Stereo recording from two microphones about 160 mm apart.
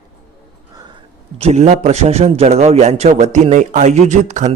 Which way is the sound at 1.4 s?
45° right (ahead or behind).